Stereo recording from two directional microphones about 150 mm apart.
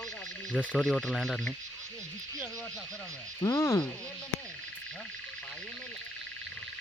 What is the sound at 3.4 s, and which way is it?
Speech, 20° left (ahead or behind).